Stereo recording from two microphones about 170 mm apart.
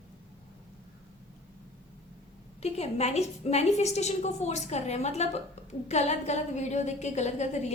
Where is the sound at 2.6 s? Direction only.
40° left (ahead or behind).